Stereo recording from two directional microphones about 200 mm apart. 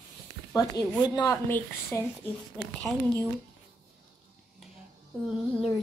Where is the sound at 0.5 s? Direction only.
20° left (ahead or behind).